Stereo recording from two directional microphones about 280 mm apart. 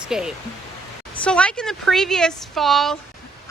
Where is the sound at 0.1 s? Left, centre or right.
Centre.